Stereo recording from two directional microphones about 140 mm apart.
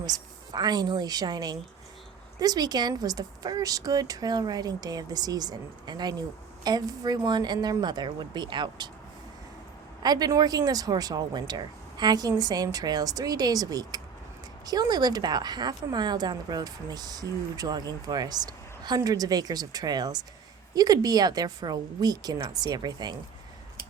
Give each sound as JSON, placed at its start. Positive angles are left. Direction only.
{"t": 0.0, "sound": "a woman's voice", "side_deg": -30}
{"t": 10.0, "sound": "a woman's voice", "side_deg": -30}